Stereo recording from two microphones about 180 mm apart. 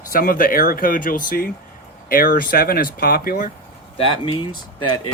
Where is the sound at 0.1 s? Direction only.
50° left (ahead or behind).